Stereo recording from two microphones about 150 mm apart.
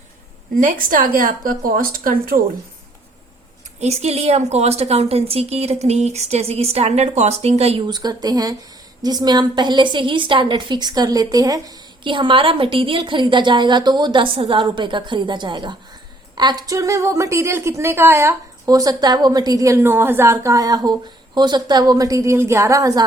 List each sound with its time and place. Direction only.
0.6 s a woman's voice: 65° right (ahead or behind)
3.8 s a woman's voice: 45° right (ahead or behind)
7.9 s a woman's voice: 25° right (ahead or behind)